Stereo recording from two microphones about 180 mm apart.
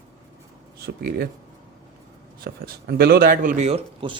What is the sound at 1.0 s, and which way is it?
Speech, 60° right (ahead or behind).